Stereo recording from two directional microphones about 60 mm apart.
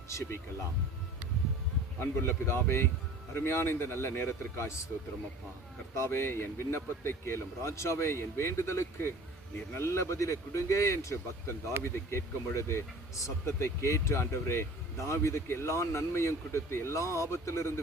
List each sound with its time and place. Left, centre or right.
0.1 s speech: left
2.0 s speech: left
5.9 s speech: left